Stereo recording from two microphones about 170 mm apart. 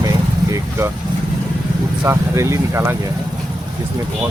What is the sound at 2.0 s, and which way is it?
Speech, 15° right (ahead or behind).